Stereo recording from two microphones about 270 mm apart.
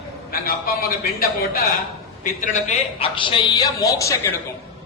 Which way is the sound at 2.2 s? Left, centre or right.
Left.